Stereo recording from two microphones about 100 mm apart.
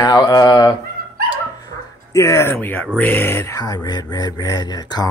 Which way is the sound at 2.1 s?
30° left (ahead or behind).